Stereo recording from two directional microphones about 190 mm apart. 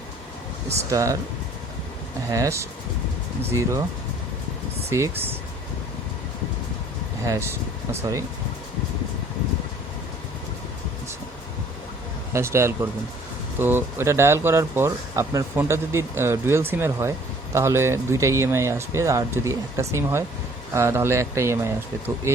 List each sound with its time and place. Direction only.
0.9 s speech: 15° right (ahead or behind)
2.3 s speech: 15° right (ahead or behind)
4.9 s speech: 15° right (ahead or behind)
7.3 s speech: 15° right (ahead or behind)
12.3 s speech: 15° right (ahead or behind)